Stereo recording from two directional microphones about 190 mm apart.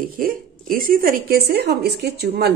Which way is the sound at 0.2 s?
50° right (ahead or behind).